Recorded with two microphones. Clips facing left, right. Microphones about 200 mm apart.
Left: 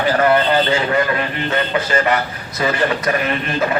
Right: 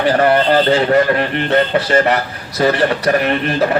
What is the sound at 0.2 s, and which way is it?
Speech, 40° right (ahead or behind).